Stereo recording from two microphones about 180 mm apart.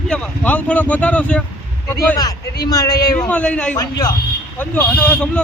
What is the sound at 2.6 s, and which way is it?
Speech, 20° left (ahead or behind).